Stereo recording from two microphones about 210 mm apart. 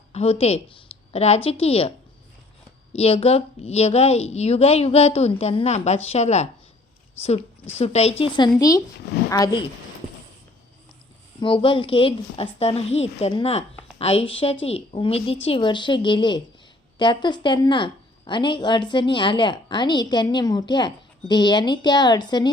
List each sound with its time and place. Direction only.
0.1 s a woman's voice: 30° left (ahead or behind)
2.9 s a woman's voice: 30° left (ahead or behind)
11.3 s a woman's voice: 25° left (ahead or behind)